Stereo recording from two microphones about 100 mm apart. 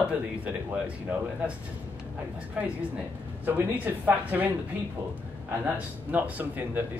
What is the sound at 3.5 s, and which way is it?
Speech, 15° right (ahead or behind).